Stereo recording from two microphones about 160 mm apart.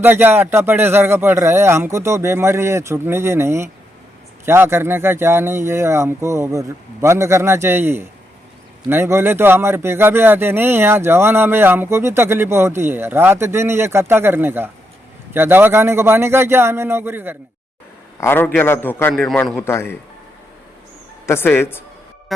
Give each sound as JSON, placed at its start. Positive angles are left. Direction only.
{"t": 0.0, "sound": "speech", "side_deg": -15}
{"t": 18.2, "sound": "a man's voice", "side_deg": 15}
{"t": 19.1, "sound": "a man's voice", "side_deg": 5}
{"t": 21.2, "sound": "a man's voice", "side_deg": 15}
{"t": 22.3, "sound": "music", "side_deg": 0}